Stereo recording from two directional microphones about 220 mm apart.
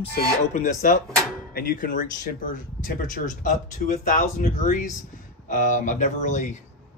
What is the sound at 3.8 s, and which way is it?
Speech, 35° left (ahead or behind).